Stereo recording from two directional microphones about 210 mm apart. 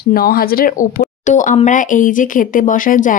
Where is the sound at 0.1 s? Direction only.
45° left (ahead or behind).